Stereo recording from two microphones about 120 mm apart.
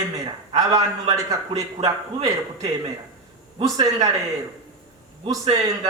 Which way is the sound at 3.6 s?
30° right (ahead or behind).